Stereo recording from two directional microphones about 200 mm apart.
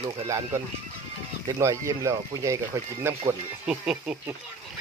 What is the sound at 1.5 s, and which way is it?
Speech, 15° right (ahead or behind).